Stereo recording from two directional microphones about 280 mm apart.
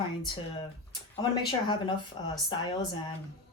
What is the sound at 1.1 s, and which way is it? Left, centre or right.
Speech, centre.